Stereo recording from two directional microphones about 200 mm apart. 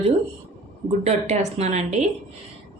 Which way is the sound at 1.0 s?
35° right (ahead or behind).